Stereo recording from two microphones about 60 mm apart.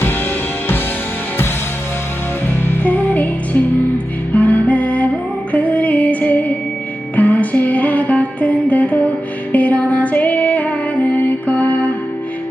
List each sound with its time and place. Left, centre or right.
2.6 s music: left